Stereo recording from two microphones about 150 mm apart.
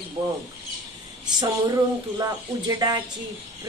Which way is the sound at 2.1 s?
25° right (ahead or behind).